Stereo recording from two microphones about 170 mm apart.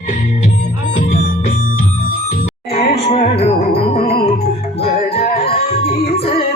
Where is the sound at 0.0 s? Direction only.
50° left (ahead or behind).